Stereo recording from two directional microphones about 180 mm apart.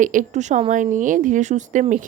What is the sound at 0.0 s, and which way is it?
Speech, 45° right (ahead or behind).